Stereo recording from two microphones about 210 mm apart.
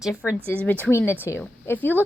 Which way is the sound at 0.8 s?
10° left (ahead or behind).